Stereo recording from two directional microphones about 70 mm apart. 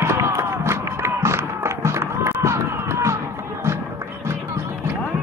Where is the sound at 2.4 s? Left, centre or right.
Right.